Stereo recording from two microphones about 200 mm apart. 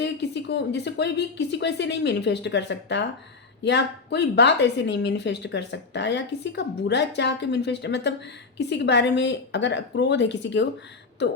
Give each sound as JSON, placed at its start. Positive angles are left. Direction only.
{"t": 0.0, "sound": "speech", "side_deg": 60}